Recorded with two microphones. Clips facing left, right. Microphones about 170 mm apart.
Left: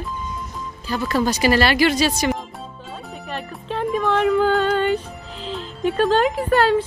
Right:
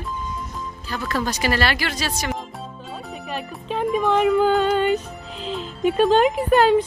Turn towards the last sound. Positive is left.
turn(degrees=-15)  # may be behind; listen again after turning